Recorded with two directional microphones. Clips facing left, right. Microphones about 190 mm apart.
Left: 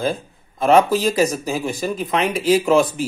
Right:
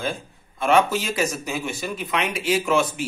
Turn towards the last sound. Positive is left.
turn(degrees=35)  # may be behind; listen again after turning